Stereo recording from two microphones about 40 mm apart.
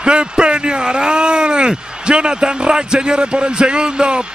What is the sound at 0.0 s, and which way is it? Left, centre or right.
Speech, right.